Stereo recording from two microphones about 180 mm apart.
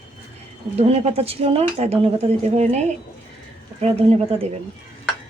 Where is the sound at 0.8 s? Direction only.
35° right (ahead or behind).